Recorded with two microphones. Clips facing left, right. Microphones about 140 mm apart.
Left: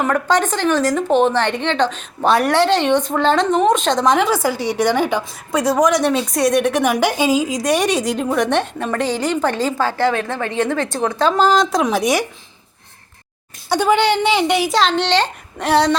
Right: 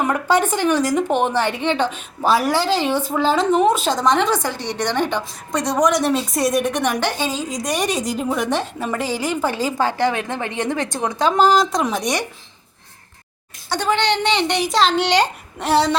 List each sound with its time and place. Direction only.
0.0 s a woman's voice: 10° right (ahead or behind)
11.6 s a woman's voice: centre (ahead or behind)
13.7 s a woman's voice: 10° left (ahead or behind)